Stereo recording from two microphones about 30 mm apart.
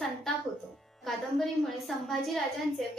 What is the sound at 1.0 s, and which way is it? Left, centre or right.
A woman's voice, centre.